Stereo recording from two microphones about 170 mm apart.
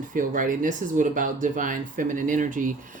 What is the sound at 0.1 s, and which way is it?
Speech, 50° right (ahead or behind).